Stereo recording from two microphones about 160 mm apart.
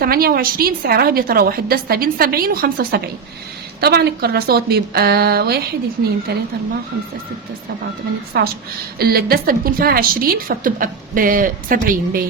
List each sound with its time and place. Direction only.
0.0 s a woman's voice: 70° right (ahead or behind)
3.8 s a woman's voice: 85° right
8.3 s a woman's voice: 90° right
9.0 s a woman's voice: 70° right (ahead or behind)